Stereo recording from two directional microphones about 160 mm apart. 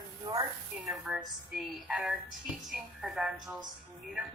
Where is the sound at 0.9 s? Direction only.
Centre (ahead or behind).